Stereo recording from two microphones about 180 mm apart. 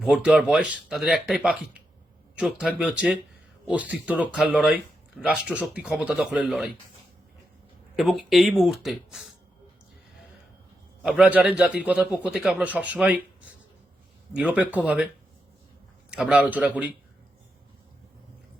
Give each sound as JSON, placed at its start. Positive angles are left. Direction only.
{"t": 0.3, "sound": "a man's voice", "side_deg": -5}
{"t": 7.9, "sound": "speech", "side_deg": 0}
{"t": 11.0, "sound": "a man's voice", "side_deg": -5}
{"t": 14.3, "sound": "a man's voice", "side_deg": -5}
{"t": 16.0, "sound": "speech", "side_deg": -5}